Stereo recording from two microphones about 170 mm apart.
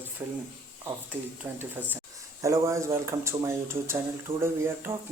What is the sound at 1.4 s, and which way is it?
Speech, 10° right (ahead or behind).